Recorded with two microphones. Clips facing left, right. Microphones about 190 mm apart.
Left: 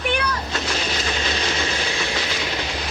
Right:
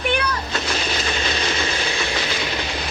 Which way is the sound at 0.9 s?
60° right (ahead or behind).